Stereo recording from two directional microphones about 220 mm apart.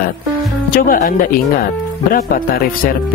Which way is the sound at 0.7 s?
40° left (ahead or behind).